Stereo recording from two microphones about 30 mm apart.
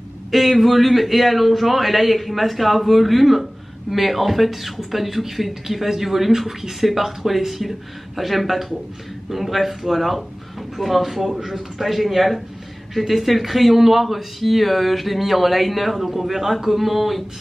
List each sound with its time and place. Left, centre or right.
0.3 s speech: centre